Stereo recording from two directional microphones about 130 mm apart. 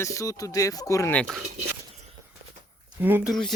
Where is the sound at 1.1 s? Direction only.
10° left (ahead or behind).